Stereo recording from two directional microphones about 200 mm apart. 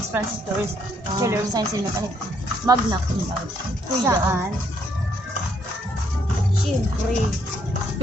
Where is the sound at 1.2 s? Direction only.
15° right (ahead or behind).